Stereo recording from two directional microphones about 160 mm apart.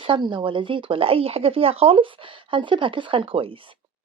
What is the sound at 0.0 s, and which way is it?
Speech, 30° right (ahead or behind).